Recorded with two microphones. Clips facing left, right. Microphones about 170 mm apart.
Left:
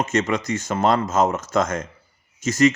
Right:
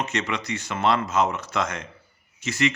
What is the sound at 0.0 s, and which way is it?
A man's voice, 45° left (ahead or behind).